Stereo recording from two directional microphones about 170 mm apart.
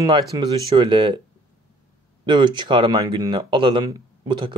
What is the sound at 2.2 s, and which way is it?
Speech, 25° right (ahead or behind).